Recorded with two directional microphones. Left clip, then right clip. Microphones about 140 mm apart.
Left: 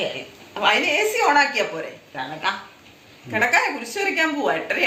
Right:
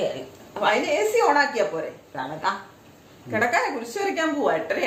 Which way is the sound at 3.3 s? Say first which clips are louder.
Left 3 dB; 75° right (ahead or behind).